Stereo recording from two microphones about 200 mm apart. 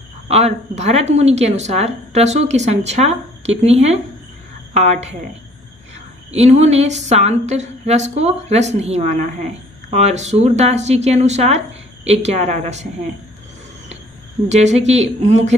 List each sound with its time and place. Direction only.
0.3 s speech: 35° right (ahead or behind)
6.3 s speech: 30° right (ahead or behind)
14.5 s speech: 35° right (ahead or behind)